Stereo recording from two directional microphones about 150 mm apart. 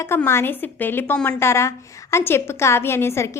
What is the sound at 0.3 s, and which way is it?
A woman's voice, 15° left (ahead or behind).